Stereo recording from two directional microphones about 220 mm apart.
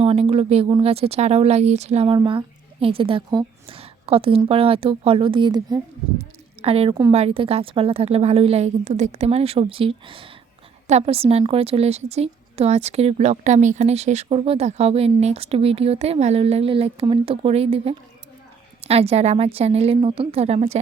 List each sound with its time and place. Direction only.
0.0 s a woman's voice: 25° right (ahead or behind)